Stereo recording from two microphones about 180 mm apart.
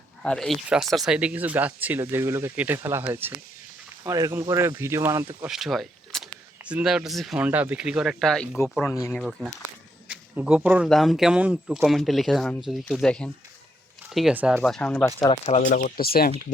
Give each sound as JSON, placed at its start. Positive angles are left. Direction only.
{"t": 0.2, "sound": "speech", "side_deg": 5}
{"t": 5.5, "sound": "speech", "side_deg": 0}
{"t": 10.1, "sound": "a sound", "side_deg": -5}
{"t": 10.8, "sound": "speech", "side_deg": 0}
{"t": 14.6, "sound": "speech", "side_deg": 5}
{"t": 15.3, "sound": "speech", "side_deg": 35}
{"t": 15.7, "sound": "speech", "side_deg": 55}